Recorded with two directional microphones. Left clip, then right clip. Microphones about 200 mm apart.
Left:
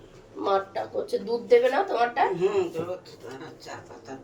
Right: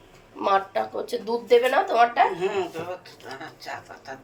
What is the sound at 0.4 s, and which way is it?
Speech, 25° right (ahead or behind).